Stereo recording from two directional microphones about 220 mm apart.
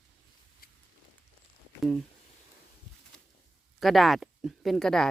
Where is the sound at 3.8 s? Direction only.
Centre (ahead or behind).